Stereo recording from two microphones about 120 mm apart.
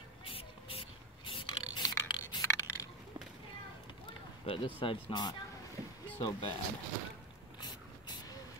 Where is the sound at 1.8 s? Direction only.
30° left (ahead or behind).